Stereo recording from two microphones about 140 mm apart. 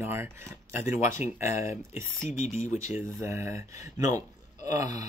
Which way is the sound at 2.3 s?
60° left (ahead or behind).